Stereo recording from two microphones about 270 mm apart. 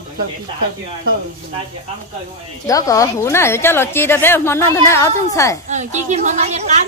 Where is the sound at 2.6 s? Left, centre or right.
Centre.